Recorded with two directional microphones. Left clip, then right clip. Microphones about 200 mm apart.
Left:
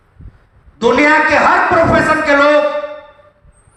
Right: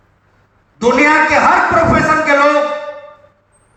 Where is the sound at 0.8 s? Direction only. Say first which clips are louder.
Even; 30° left (ahead or behind).